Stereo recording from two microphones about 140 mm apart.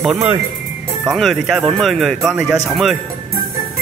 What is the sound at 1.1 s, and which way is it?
Speech, centre (ahead or behind).